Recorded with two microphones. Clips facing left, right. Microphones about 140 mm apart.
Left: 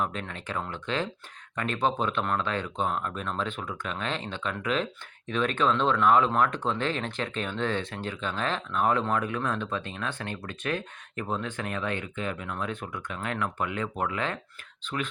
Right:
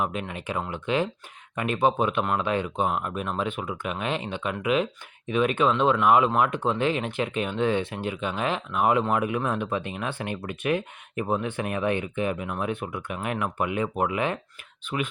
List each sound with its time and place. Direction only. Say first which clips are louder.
0.0 s speech: right 3 dB; 10° right (ahead or behind)